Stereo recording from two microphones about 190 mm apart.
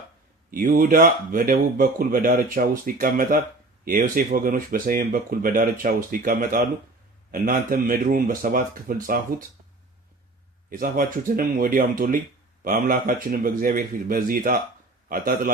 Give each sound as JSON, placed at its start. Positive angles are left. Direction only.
{"t": 0.5, "sound": "speech", "side_deg": -45}
{"t": 10.7, "sound": "speech", "side_deg": -45}